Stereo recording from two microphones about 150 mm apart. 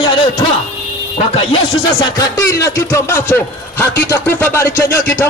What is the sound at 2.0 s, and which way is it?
A man's voice, 25° left (ahead or behind).